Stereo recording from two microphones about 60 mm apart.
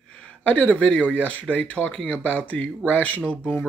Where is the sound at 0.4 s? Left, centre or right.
Left.